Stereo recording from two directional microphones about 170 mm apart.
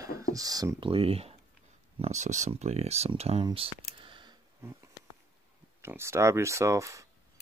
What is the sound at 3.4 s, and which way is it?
Typing, 30° right (ahead or behind).